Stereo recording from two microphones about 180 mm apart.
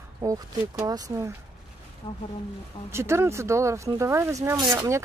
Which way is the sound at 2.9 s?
15° right (ahead or behind).